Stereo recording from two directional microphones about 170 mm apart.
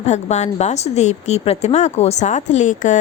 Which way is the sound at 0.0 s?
40° left (ahead or behind).